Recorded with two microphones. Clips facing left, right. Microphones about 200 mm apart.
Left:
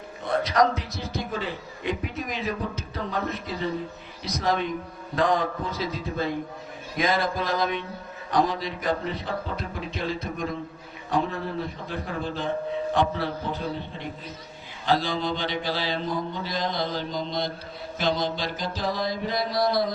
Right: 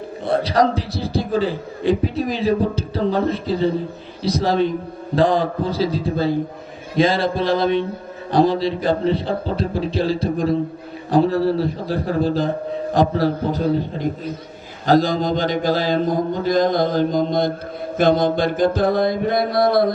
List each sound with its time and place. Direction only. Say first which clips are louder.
0.3 s a man's voice: right 5 dB; 30° right (ahead or behind)
6.9 s a sound: right 8 dB; 30° right (ahead or behind)
8.3 s a man's voice: right 8 dB; 30° right (ahead or behind); by 19.9 s 55° right (ahead or behind)